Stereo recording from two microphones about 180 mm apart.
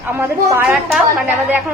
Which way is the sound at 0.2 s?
10° right (ahead or behind).